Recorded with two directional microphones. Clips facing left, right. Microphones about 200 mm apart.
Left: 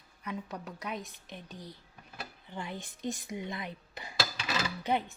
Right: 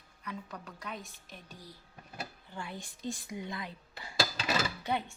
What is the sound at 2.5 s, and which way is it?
A woman's voice, 20° left (ahead or behind).